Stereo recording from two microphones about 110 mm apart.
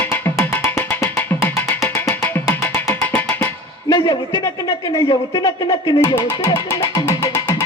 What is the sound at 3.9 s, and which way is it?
Speech, 40° left (ahead or behind).